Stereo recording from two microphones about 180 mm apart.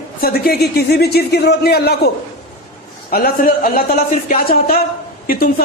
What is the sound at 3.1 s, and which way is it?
A man's voice, 55° left (ahead or behind).